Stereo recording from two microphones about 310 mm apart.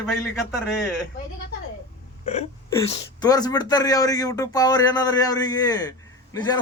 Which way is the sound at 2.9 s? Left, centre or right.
Centre.